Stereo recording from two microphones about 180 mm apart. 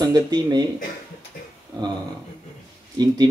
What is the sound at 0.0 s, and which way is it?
Speech, 20° right (ahead or behind).